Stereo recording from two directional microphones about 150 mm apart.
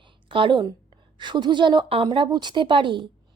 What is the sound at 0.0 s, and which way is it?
A woman's voice, 35° right (ahead or behind).